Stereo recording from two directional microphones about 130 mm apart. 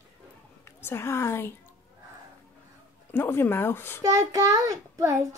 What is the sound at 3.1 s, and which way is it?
Speech, 15° left (ahead or behind).